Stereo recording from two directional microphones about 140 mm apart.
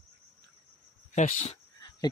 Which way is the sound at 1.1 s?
55° left (ahead or behind).